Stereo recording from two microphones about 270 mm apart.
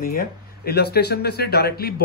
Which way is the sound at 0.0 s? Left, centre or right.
Left.